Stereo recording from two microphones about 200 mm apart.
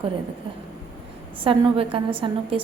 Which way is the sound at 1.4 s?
25° right (ahead or behind).